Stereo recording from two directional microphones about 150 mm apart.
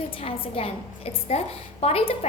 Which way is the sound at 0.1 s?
35° left (ahead or behind).